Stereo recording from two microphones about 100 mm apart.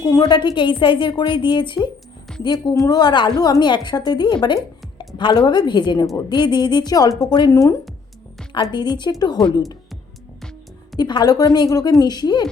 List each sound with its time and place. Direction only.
0.0 s a woman's voice: 40° left (ahead or behind)
7.5 s speech: 35° left (ahead or behind)
8.7 s a woman's voice: 45° left (ahead or behind)
10.9 s a woman's voice: 45° left (ahead or behind)